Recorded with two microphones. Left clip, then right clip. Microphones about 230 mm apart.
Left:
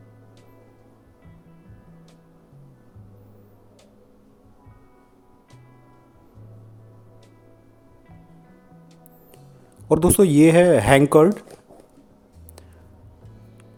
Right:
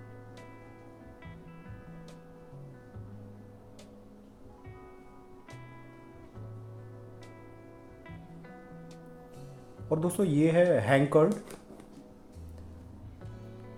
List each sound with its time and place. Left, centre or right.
9.9 s speech: left